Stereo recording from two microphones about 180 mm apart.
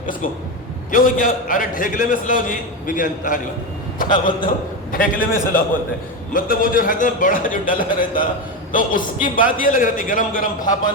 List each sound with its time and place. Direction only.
0.9 s a man's voice: 50° left (ahead or behind)